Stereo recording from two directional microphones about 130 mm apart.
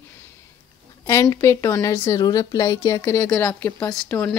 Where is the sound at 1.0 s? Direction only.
25° left (ahead or behind).